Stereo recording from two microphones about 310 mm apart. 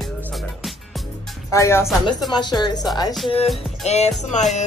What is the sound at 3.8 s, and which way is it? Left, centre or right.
Speech, left.